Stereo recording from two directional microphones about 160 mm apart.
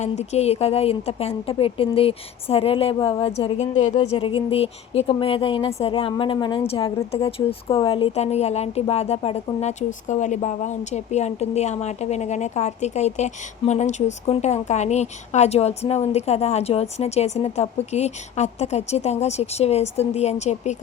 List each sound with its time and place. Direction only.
0.0 s a woman's voice: 45° left (ahead or behind)